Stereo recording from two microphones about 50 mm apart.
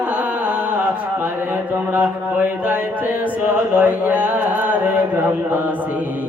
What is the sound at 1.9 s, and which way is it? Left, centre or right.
Mantra, right.